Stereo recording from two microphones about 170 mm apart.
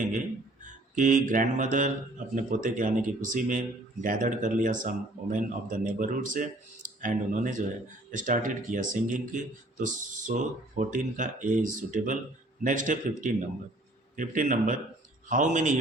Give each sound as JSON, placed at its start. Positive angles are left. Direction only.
{"t": 0.6, "sound": "mantra", "side_deg": -50}
{"t": 2.3, "sound": "speech", "side_deg": -50}